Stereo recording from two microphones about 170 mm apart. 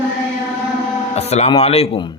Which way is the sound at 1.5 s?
35° left (ahead or behind).